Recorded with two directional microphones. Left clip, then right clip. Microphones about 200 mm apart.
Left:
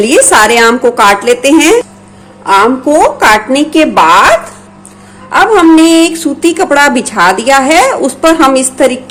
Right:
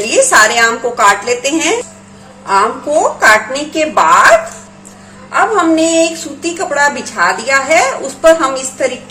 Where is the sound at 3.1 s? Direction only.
50° left (ahead or behind).